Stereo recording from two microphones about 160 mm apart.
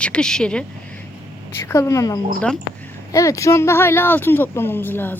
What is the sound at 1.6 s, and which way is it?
Speech, 20° left (ahead or behind).